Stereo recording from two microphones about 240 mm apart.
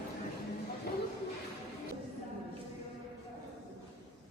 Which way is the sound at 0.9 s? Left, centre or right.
Left.